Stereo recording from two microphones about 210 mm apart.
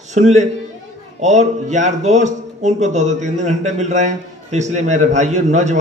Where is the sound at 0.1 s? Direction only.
35° right (ahead or behind).